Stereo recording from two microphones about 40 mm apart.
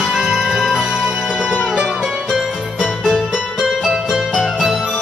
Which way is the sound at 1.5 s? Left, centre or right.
Right.